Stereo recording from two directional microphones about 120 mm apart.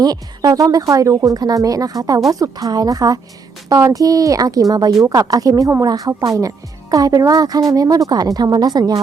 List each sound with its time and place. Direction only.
0.0 s a child's voice: 35° right (ahead or behind)